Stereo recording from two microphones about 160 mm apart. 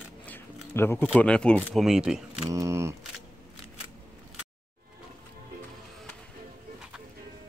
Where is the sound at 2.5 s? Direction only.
20° right (ahead or behind).